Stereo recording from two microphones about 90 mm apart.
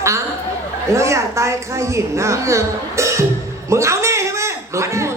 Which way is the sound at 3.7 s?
35° right (ahead or behind).